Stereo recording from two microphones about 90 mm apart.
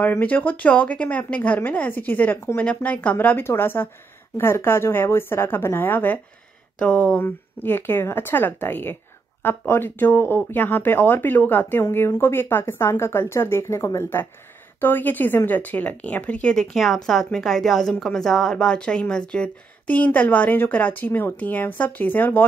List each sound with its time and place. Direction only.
0.0 s a woman's voice: 20° left (ahead or behind)
6.8 s a woman's voice: 10° left (ahead or behind)
7.2 s speech: 25° left (ahead or behind)
16.7 s a woman's voice: centre (ahead or behind); by 22.5 s 20° left (ahead or behind)